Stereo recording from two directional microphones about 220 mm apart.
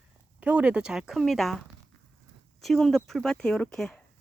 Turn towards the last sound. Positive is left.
turn(degrees=5)  # may be behind; listen again after turning